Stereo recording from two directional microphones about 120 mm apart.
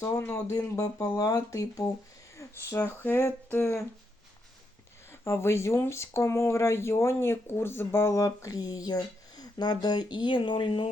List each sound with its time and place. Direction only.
0.0 s speech: 25° left (ahead or behind)
5.2 s speech: 20° left (ahead or behind); by 10.8 s 45° left (ahead or behind)